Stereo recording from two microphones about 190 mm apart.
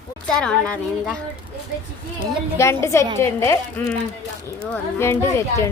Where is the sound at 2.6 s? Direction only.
15° left (ahead or behind).